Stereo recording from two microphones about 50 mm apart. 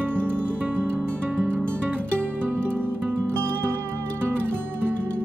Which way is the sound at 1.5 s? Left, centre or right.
Centre.